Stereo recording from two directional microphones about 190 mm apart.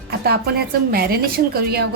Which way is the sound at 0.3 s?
55° right (ahead or behind).